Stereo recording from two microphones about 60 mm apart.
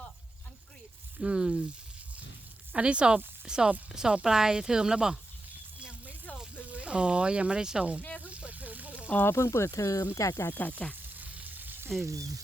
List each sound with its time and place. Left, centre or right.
1.2 s speech: centre
2.7 s speech: centre
6.6 s speech: right
8.0 s snake: left
8.3 s snake: right
9.2 s speech: left
10.5 s sizzle: left
11.2 s frying: right
12.0 s speech: right